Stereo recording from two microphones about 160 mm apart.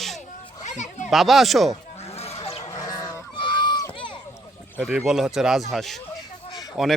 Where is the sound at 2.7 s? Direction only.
20° left (ahead or behind).